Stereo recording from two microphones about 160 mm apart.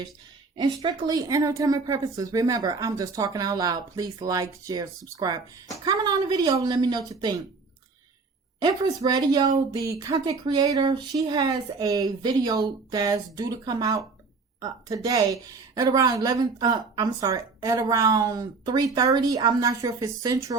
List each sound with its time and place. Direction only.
0.8 s a woman's voice: 25° right (ahead or behind)
8.5 s a woman's voice: 25° right (ahead or behind)